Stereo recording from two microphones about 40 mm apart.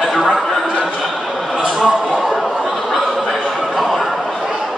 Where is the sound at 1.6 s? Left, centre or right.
Right.